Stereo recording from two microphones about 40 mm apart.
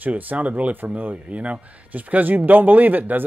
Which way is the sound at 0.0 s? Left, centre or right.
Right.